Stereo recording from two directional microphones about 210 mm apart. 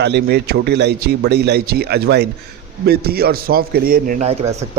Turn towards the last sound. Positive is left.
turn(degrees=-30)  # may be behind; listen again after turning